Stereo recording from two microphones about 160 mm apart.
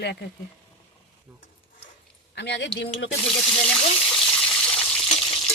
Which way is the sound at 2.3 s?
90° left.